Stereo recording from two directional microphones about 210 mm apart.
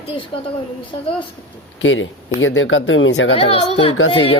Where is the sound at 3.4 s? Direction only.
25° left (ahead or behind).